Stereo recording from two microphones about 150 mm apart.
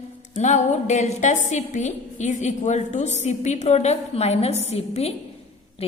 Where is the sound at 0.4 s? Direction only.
50° left (ahead or behind).